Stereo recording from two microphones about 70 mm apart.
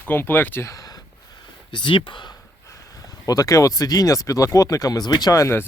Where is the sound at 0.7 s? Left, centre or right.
Left.